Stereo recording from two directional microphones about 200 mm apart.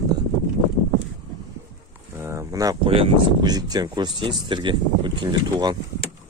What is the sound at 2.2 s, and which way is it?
Speech, 15° right (ahead or behind).